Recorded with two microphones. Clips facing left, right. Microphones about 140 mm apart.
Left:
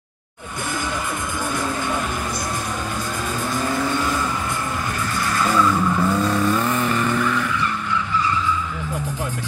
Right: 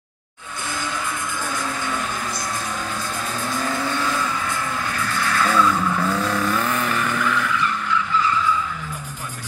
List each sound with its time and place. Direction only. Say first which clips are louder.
5.3 s vehicle: even; 5° left (ahead or behind)